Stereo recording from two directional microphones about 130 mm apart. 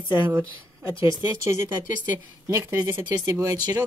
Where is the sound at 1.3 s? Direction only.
25° right (ahead or behind).